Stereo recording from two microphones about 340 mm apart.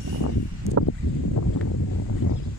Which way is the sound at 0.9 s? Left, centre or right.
Left.